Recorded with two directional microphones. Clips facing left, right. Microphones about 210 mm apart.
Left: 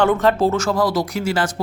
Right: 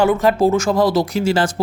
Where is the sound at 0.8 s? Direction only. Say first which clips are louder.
Right 4 dB; 25° right (ahead or behind).